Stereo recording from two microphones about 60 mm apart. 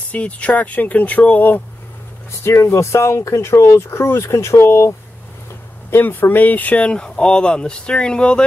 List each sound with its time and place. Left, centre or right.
0.1 s speech: left
2.4 s speech: left
5.9 s speech: left; by 8.5 s centre